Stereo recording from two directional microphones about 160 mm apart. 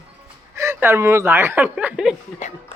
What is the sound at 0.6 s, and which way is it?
Speech, 15° right (ahead or behind).